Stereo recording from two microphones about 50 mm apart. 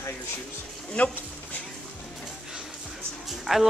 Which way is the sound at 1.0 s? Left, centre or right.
Left.